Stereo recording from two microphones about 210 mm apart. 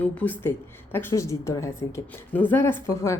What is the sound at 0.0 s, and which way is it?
A woman's voice, 10° left (ahead or behind).